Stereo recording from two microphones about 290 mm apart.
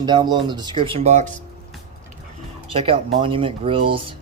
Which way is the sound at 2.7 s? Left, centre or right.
Centre.